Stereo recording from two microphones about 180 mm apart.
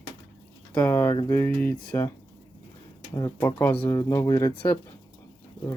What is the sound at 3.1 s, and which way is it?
Speech, 20° left (ahead or behind).